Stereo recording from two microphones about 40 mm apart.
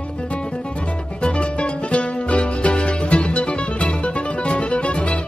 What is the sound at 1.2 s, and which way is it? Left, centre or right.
Music, left.